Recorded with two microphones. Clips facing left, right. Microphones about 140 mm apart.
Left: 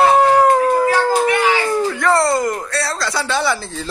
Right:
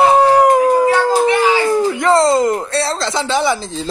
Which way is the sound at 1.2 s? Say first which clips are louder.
Right 3 dB; 25° right (ahead or behind).